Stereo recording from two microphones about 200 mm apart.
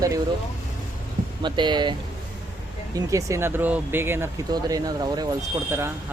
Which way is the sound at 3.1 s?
15° right (ahead or behind).